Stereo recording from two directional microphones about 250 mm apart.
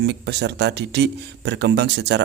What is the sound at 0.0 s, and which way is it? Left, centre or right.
Speech, right.